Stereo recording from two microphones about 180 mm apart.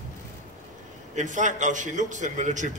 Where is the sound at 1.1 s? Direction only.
45° right (ahead or behind).